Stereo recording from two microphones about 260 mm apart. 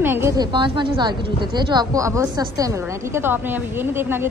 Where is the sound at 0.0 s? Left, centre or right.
Centre.